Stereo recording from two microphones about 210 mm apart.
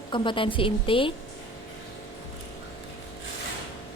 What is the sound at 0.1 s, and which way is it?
A woman's voice, 25° left (ahead or behind).